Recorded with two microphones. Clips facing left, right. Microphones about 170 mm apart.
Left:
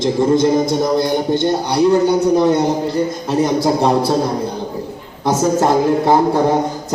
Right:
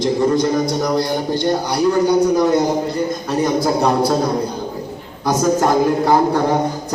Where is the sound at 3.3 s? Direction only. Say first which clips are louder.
Left 2 dB; 25° left (ahead or behind).